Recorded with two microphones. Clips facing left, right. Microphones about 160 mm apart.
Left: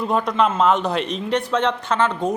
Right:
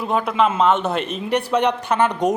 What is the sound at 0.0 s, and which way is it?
Speech, 5° right (ahead or behind).